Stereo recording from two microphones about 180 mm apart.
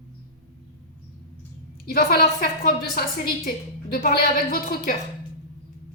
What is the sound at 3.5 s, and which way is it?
A woman's voice, 55° left (ahead or behind).